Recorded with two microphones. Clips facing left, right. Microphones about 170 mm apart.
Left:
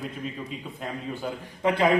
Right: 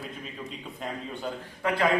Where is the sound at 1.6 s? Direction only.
20° left (ahead or behind).